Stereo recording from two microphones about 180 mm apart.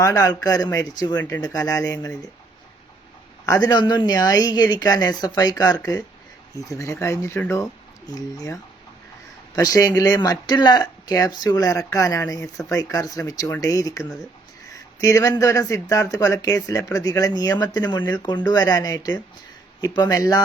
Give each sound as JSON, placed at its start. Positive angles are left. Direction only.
{"t": 0.0, "sound": "speech", "side_deg": 20}
{"t": 3.4, "sound": "speech", "side_deg": 20}
{"t": 9.6, "sound": "speech", "side_deg": 20}
{"t": 14.0, "sound": "speech", "side_deg": 0}
{"t": 14.7, "sound": "speech", "side_deg": 20}